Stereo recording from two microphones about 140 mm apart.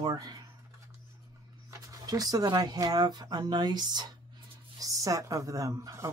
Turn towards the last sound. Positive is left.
turn(degrees=-20)  # may be behind; listen again after turning